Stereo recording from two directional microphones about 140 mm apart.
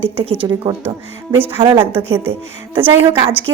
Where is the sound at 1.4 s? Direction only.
15° right (ahead or behind).